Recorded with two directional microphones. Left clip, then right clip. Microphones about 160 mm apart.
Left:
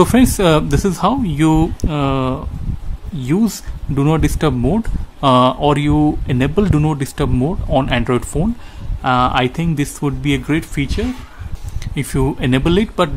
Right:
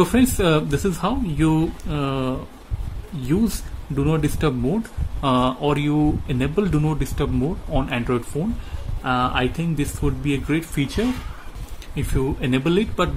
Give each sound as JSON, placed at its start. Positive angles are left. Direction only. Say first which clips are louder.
{"t": 0.0, "sound": "speech", "louder": "left 6 dB", "side_deg": 40}
{"t": 10.7, "sound": "speech", "louder": "left 2 dB", "side_deg": 10}
{"t": 11.9, "sound": "speech", "louder": "left 5 dB", "side_deg": 45}